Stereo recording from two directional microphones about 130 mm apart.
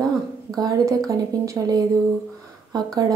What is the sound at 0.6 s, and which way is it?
Speech, 30° right (ahead or behind).